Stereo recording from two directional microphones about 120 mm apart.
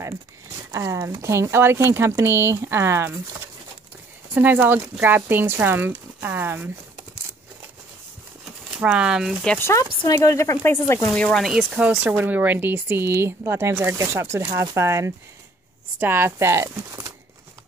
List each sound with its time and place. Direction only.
0.7 s speech: 25° right (ahead or behind)
4.3 s speech: 15° right (ahead or behind)
8.5 s a sound: 5° right (ahead or behind)
9.6 s speech: 20° left (ahead or behind)
11.1 s speech: 5° left (ahead or behind); by 17.1 s 25° right (ahead or behind)